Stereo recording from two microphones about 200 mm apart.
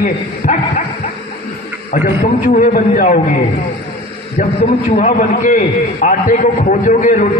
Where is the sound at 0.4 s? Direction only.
45° left (ahead or behind).